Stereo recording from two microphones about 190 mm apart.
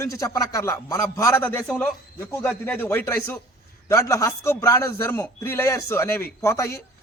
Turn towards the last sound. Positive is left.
turn(degrees=15)  # may be behind; listen again after turning